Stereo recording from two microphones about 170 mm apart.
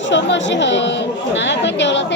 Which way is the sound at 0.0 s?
90° left.